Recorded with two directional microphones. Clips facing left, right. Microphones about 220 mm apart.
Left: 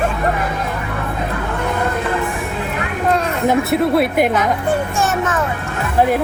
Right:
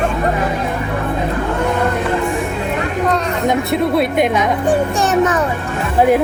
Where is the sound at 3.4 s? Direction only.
5° left (ahead or behind).